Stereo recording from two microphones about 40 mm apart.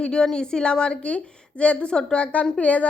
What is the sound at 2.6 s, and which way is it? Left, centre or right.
Speech, left.